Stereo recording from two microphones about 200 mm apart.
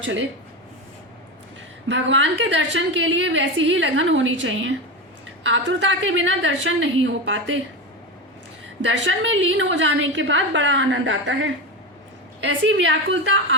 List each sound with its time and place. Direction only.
0.0 s a woman's voice: 70° right (ahead or behind)
1.9 s a woman's voice: 70° right (ahead or behind)
8.8 s a woman's voice: 65° right (ahead or behind)